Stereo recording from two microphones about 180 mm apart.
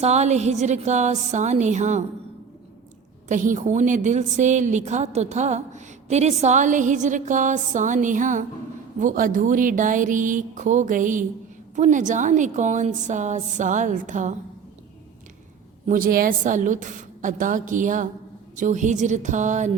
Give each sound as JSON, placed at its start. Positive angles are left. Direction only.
{"t": 0.0, "sound": "a woman's voice", "side_deg": -40}
{"t": 3.2, "sound": "a woman's voice", "side_deg": -45}
{"t": 15.9, "sound": "a woman's voice", "side_deg": -50}